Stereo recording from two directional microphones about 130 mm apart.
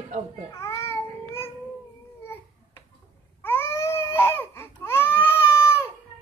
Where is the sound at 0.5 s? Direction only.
25° left (ahead or behind).